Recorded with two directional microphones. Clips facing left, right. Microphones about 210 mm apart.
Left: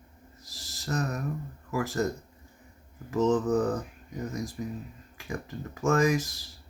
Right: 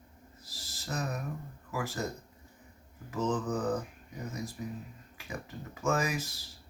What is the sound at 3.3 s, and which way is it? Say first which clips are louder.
Speech: left 7 dB; 40° left (ahead or behind).